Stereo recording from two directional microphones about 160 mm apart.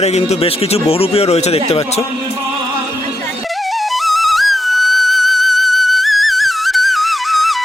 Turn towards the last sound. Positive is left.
turn(degrees=0)  # may be behind; listen again after turning